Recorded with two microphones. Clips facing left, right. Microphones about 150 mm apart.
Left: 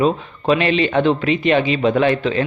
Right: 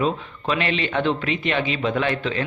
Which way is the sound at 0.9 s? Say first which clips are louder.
Left 4 dB; 45° left (ahead or behind).